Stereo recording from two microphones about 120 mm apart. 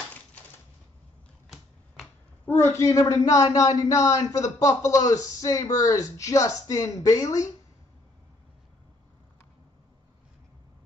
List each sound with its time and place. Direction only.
2.4 s speech: 20° left (ahead or behind)